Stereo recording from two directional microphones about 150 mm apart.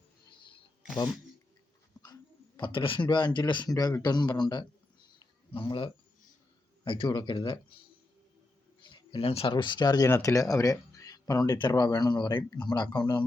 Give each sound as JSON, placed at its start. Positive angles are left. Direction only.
{"t": 2.6, "sound": "speech", "side_deg": 35}
{"t": 5.2, "sound": "a sound", "side_deg": 30}
{"t": 6.8, "sound": "speech", "side_deg": 35}
{"t": 8.8, "sound": "speech", "side_deg": 30}